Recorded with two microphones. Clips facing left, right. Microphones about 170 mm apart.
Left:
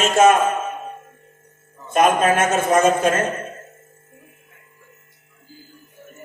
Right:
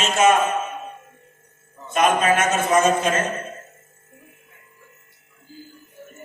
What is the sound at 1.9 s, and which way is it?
A man's voice, 50° left (ahead or behind).